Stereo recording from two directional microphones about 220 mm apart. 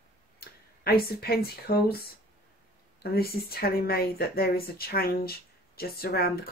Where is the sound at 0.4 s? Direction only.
45° left (ahead or behind).